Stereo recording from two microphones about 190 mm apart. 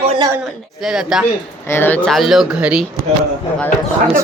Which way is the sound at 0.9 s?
5° right (ahead or behind).